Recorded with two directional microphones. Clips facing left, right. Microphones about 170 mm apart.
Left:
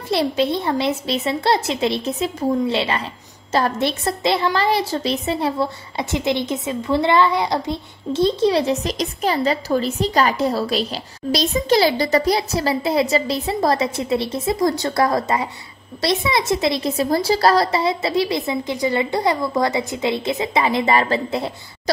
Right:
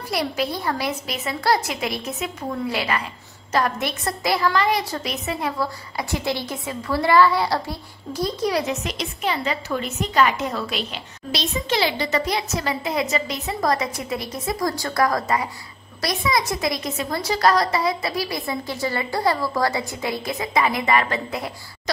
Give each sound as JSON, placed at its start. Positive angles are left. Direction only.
{"t": 0.1, "sound": "a woman's voice", "side_deg": 25}